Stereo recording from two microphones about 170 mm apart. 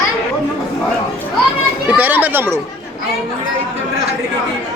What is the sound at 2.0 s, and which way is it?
Speech, 10° right (ahead or behind).